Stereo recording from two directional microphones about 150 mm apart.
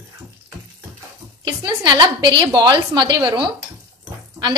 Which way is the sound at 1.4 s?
30° right (ahead or behind).